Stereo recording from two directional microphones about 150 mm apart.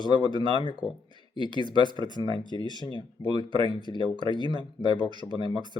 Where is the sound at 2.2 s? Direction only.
30° left (ahead or behind).